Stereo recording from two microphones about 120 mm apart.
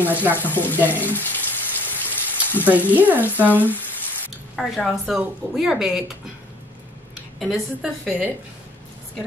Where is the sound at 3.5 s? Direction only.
15° left (ahead or behind).